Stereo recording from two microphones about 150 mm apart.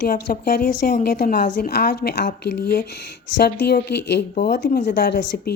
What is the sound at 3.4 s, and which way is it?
Speech, 90° left.